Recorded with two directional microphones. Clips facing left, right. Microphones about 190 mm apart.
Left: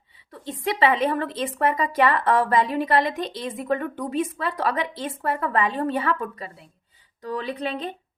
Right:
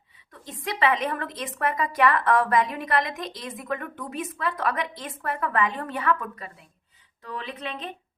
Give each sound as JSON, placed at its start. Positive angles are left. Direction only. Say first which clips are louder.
{"t": 0.3, "sound": "a woman's voice", "louder": "left 6 dB", "side_deg": 30}